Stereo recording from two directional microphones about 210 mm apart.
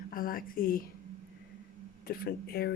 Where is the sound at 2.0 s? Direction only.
45° left (ahead or behind).